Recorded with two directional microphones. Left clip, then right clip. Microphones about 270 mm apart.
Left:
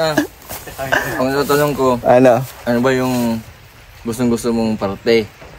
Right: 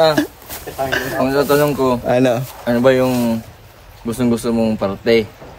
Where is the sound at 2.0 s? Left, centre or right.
Centre.